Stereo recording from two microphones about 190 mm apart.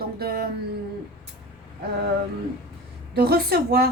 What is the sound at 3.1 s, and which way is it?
Speech, 55° right (ahead or behind).